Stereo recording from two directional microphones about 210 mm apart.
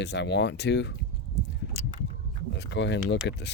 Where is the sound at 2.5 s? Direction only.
55° left (ahead or behind).